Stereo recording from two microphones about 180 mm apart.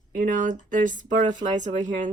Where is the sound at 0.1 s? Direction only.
50° right (ahead or behind).